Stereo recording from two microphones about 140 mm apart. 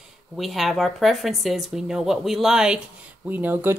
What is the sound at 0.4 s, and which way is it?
Speech, centre (ahead or behind).